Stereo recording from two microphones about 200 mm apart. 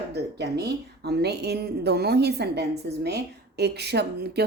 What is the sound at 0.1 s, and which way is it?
A woman's voice, 55° right (ahead or behind).